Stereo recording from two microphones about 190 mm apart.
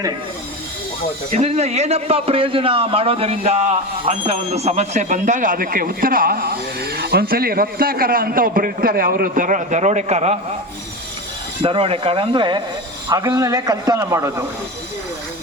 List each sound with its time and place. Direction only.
1.3 s a man's voice: 35° right (ahead or behind)
11.6 s a man's voice: 30° right (ahead or behind)